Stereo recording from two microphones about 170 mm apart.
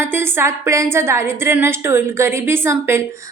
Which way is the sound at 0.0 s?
15° right (ahead or behind).